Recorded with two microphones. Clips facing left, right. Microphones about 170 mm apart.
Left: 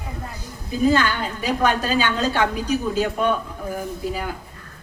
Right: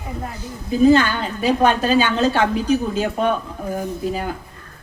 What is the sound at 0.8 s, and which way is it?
A woman's voice, 25° right (ahead or behind).